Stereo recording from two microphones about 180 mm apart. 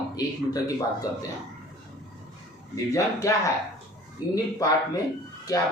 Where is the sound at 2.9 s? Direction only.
15° left (ahead or behind).